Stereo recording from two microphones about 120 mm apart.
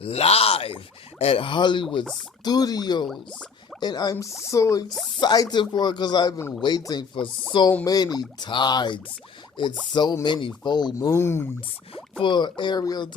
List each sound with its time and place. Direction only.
0.0 s groan: 55° left (ahead or behind)
1.2 s speech: 50° left (ahead or behind)
2.4 s speech: 35° left (ahead or behind)
11.1 s speech: 20° left (ahead or behind)
12.2 s speech: 40° left (ahead or behind)